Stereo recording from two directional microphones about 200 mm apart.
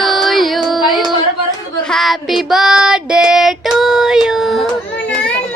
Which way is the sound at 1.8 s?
Centre (ahead or behind).